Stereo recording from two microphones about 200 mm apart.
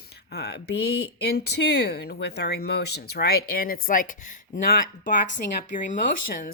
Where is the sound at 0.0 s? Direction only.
55° left (ahead or behind).